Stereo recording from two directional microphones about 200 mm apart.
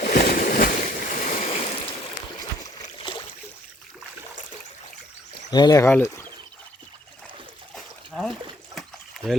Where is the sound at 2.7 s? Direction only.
25° left (ahead or behind).